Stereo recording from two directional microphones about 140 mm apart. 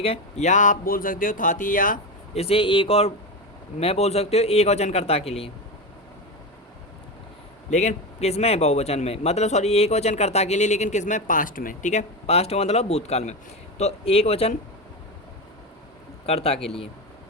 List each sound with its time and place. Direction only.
0.0 s speech: 50° left (ahead or behind); by 2.0 s 75° left (ahead or behind)
2.3 s a man's voice: 45° left (ahead or behind)
7.7 s a man's voice: 55° left (ahead or behind)
16.2 s a man's voice: 45° left (ahead or behind)